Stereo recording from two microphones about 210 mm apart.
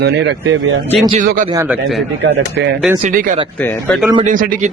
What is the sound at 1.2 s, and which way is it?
Speech, 40° right (ahead or behind).